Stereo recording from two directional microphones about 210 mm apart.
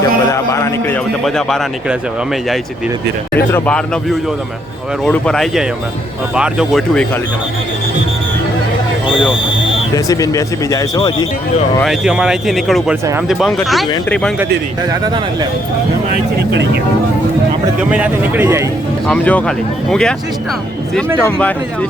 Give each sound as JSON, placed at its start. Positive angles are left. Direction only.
{"t": 0.3, "sound": "speech", "side_deg": 15}
{"t": 1.2, "sound": "speech", "side_deg": 0}
{"t": 3.3, "sound": "speech", "side_deg": 5}
{"t": 5.0, "sound": "speech", "side_deg": 5}
{"t": 9.9, "sound": "speech", "side_deg": 15}
{"t": 11.8, "sound": "speech", "side_deg": 0}
{"t": 15.0, "sound": "speech", "side_deg": -20}
{"t": 17.9, "sound": "a man's voice", "side_deg": -10}
{"t": 19.0, "sound": "speech", "side_deg": 5}
{"t": 21.2, "sound": "speech", "side_deg": 5}